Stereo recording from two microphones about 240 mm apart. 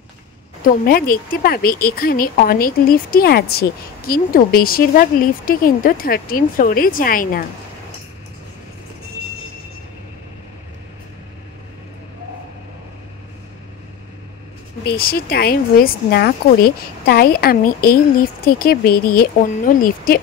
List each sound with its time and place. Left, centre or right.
0.8 s speech: left
14.9 s speech: left